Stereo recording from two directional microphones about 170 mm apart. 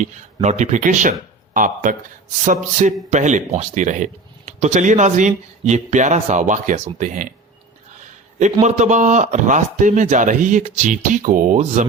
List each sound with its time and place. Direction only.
0.4 s speech: 45° right (ahead or behind)
8.0 s a sound: 45° right (ahead or behind)
8.6 s speech: 45° right (ahead or behind)